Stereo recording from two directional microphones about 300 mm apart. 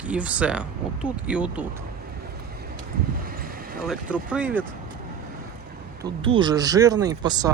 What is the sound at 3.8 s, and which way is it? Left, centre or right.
Speech, centre.